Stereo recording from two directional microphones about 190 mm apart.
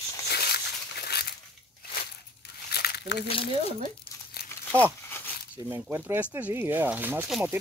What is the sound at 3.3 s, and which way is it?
Speech, 30° left (ahead or behind).